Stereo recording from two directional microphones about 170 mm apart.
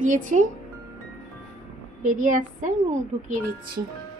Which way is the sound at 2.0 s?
50° right (ahead or behind).